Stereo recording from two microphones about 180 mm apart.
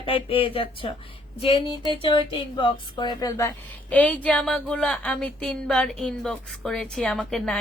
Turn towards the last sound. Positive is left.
turn(degrees=5)  # may be behind; listen again after turning